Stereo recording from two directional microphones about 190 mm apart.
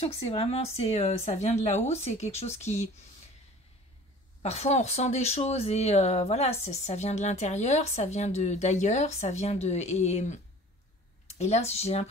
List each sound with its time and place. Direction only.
0.0 s speech: 30° left (ahead or behind)
4.4 s speech: 35° left (ahead or behind)